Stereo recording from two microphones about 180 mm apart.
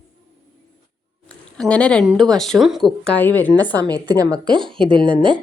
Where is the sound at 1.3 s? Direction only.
5° left (ahead or behind).